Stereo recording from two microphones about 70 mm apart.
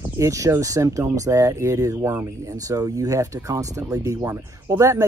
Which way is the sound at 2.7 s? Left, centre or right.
Right.